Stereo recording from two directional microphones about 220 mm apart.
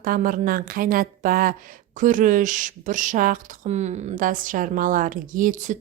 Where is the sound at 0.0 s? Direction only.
40° right (ahead or behind).